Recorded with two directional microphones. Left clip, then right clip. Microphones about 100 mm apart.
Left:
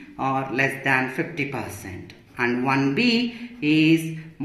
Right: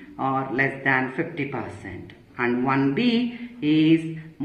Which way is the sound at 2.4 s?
15° left (ahead or behind).